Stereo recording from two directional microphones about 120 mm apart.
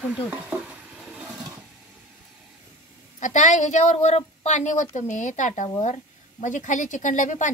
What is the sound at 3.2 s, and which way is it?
A woman's voice, 90° left.